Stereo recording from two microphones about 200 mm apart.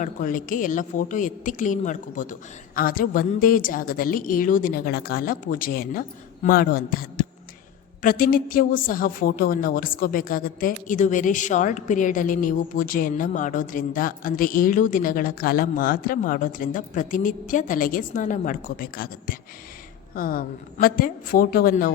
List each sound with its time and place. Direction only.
0.0 s a woman's voice: 40° left (ahead or behind)